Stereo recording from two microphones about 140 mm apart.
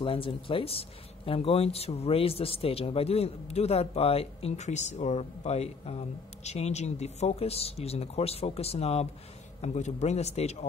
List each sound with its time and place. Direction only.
0.0 s speech: 40° left (ahead or behind)